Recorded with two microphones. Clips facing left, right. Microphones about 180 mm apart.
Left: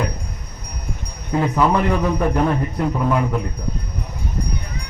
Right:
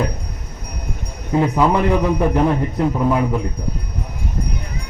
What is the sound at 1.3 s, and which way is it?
A man's voice, 10° right (ahead or behind).